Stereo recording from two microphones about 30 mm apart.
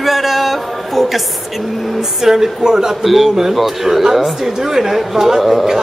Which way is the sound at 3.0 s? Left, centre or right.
Centre.